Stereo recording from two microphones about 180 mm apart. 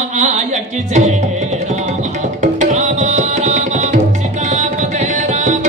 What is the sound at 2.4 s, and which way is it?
Tabla, 45° right (ahead or behind).